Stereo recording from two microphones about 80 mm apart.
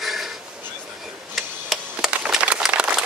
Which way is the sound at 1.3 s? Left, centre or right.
Centre.